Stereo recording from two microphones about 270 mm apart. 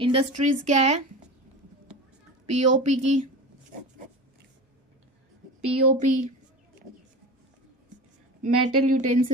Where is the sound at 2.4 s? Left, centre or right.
Right.